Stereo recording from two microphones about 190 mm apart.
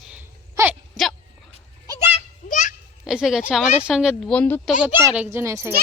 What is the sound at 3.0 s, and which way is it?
A woman's voice, 5° right (ahead or behind).